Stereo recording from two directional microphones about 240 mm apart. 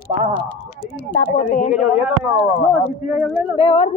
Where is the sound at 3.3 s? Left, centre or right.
Left.